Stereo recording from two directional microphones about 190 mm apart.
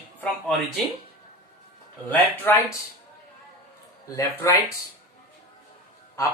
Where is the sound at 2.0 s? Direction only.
10° left (ahead or behind).